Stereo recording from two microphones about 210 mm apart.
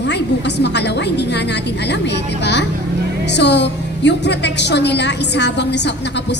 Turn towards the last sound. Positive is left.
turn(degrees=55)  # may be behind; listen again after turning